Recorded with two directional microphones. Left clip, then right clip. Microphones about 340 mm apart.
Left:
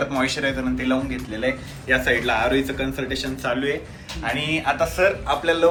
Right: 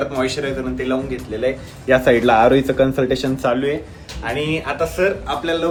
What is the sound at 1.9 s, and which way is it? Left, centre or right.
A man's voice, right.